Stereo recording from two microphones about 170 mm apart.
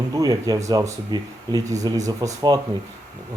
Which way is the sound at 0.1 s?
20° right (ahead or behind).